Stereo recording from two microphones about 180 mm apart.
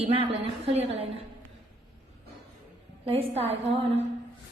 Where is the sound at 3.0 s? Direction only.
35° right (ahead or behind).